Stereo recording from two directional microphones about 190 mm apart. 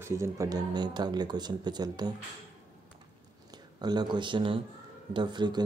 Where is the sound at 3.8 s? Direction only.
20° right (ahead or behind).